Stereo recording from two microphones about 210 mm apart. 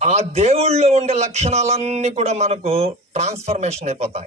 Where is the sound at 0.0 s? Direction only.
30° right (ahead or behind).